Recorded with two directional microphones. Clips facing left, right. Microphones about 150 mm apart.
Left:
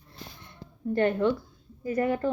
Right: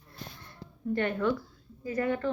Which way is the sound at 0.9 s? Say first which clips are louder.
Left 4 dB; 35° left (ahead or behind).